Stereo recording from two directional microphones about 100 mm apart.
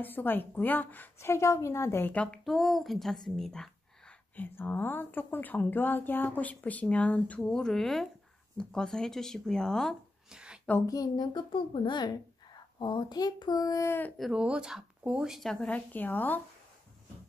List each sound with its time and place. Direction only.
0.0 s a woman's voice: 20° left (ahead or behind)
2.4 s speech: centre (ahead or behind)
4.4 s speech: 20° left (ahead or behind)
10.3 s a sound: 10° right (ahead or behind)
10.9 s speech: 40° left (ahead or behind)
13.8 s a woman's voice: 20° left (ahead or behind)
14.3 s speech: 10° right (ahead or behind)
15.5 s speech: 15° left (ahead or behind)